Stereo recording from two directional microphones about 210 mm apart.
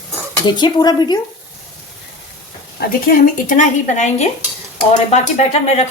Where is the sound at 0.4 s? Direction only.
20° left (ahead or behind).